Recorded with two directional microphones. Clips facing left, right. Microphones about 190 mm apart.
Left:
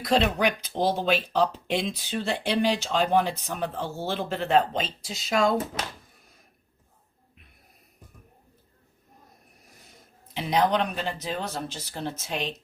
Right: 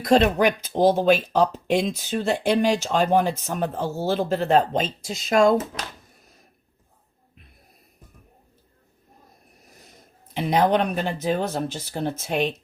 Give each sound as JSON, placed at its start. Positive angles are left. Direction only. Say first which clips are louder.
{"t": 0.0, "sound": "speech", "louder": "right 5 dB", "side_deg": -45}
{"t": 10.3, "sound": "speech", "louder": "right 4 dB", "side_deg": -55}